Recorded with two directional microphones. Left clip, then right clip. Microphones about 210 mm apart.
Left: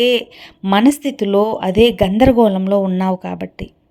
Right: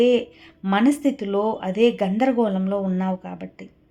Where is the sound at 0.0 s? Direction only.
30° left (ahead or behind).